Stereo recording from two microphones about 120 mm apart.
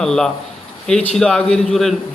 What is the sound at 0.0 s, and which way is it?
A man's voice, 5° left (ahead or behind).